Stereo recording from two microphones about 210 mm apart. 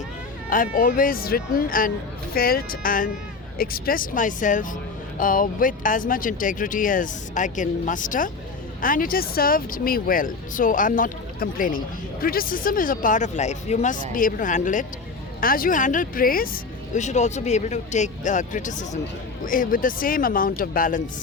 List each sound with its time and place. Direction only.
0.5 s speech: 40° left (ahead or behind)